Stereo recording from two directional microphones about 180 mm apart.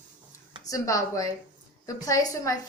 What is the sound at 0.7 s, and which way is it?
Speech, 20° left (ahead or behind).